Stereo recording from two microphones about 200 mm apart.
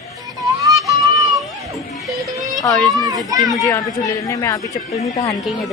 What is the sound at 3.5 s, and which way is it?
Speech, 15° left (ahead or behind).